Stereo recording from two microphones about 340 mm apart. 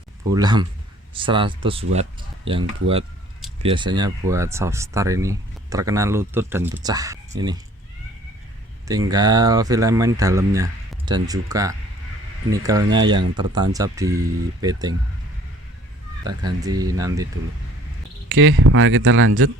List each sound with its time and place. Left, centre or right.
0.3 s speech: centre
8.9 s speech: centre
16.2 s speech: centre
18.3 s speech: right